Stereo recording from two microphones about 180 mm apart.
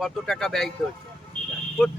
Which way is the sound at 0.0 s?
Centre (ahead or behind).